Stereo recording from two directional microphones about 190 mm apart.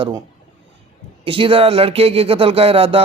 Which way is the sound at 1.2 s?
25° right (ahead or behind).